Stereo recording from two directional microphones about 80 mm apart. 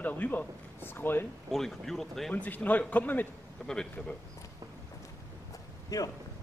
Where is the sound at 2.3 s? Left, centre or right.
Centre.